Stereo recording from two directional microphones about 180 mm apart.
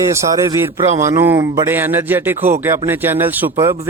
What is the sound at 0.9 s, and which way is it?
Speech, 15° right (ahead or behind).